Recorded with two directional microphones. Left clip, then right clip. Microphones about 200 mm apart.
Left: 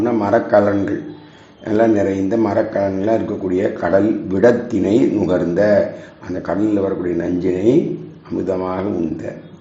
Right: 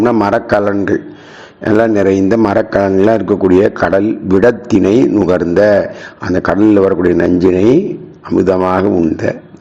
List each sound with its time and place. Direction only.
0.0 s a man's voice: 40° right (ahead or behind)